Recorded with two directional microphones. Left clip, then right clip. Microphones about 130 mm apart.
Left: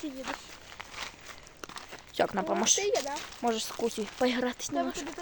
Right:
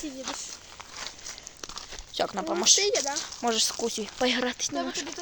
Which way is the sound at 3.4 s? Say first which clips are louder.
Right 4 dB; centre (ahead or behind).